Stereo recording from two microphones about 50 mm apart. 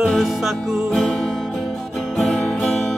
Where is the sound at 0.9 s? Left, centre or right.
Centre.